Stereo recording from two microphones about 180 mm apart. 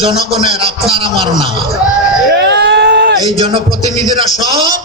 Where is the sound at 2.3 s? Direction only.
70° right (ahead or behind).